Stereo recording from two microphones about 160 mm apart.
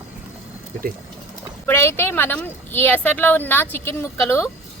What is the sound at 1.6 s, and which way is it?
Speech, 15° left (ahead or behind).